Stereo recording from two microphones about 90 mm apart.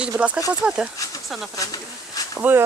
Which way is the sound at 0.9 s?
40° left (ahead or behind).